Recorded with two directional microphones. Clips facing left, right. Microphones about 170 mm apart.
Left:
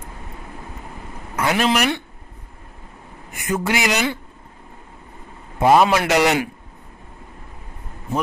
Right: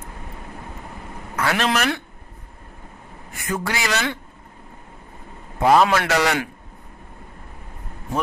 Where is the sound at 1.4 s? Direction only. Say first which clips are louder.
Left 2 dB; 20° left (ahead or behind).